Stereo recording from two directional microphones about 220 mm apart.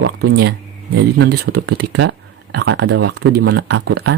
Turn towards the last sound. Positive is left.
turn(degrees=-55)  # may be behind; listen again after turning